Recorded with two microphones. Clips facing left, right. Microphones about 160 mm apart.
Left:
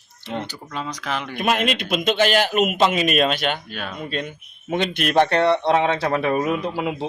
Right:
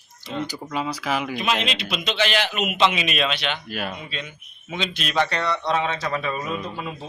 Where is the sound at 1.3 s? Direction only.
50° left (ahead or behind).